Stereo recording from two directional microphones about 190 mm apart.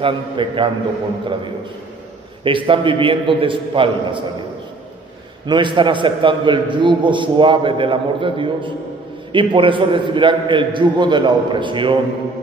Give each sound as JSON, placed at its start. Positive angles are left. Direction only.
{"t": 0.0, "sound": "a man's voice", "side_deg": -25}
{"t": 2.4, "sound": "a man's voice", "side_deg": -25}
{"t": 5.5, "sound": "a man's voice", "side_deg": -25}